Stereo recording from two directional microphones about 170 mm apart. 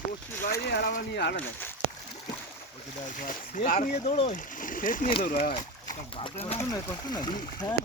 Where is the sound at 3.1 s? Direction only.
55° left (ahead or behind).